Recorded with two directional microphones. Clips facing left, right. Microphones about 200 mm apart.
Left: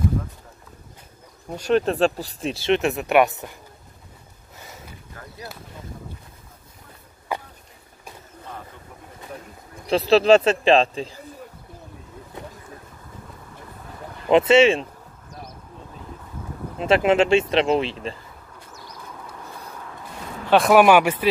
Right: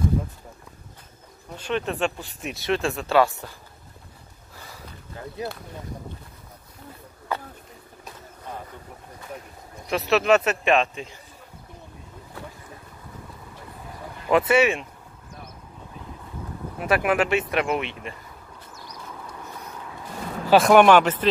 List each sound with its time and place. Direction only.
1.6 s speech: 40° left (ahead or behind); by 3.5 s 20° left (ahead or behind)
7.3 s a sound: 15° left (ahead or behind)
9.8 s speech: 30° left (ahead or behind)
14.3 s speech: 25° left (ahead or behind)
16.7 s speech: 25° left (ahead or behind)
20.4 s speech: centre (ahead or behind)